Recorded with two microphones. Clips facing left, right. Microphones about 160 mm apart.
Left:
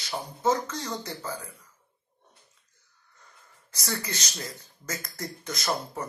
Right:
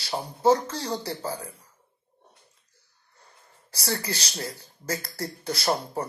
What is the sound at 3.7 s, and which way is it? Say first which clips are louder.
Speech: right 3 dB; 30° right (ahead or behind).